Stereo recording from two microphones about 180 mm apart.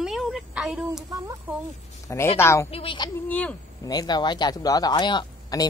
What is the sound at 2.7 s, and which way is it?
Speech, 30° left (ahead or behind).